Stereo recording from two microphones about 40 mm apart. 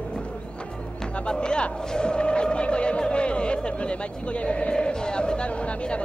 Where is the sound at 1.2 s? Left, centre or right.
Left.